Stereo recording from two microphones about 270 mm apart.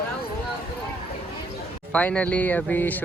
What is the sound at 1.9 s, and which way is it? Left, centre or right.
Speech, centre.